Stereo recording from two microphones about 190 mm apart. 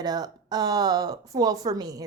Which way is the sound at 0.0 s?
20° right (ahead or behind).